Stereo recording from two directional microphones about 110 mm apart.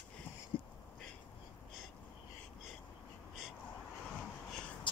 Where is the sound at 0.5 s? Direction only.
50° left (ahead or behind).